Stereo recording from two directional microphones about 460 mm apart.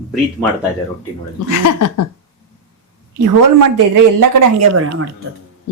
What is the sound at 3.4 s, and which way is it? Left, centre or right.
A man's voice, right.